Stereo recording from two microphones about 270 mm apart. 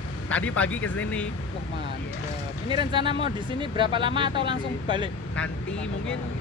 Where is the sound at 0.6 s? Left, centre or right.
Centre.